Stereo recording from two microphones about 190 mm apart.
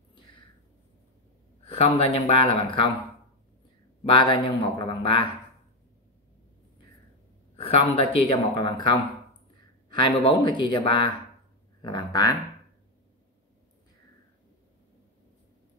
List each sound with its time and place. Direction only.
1.6 s speech: 30° left (ahead or behind)
4.0 s a man's voice: 25° left (ahead or behind)
7.5 s a man's voice: 30° left (ahead or behind)